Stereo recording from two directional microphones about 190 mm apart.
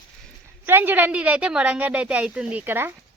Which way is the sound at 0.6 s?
10° right (ahead or behind).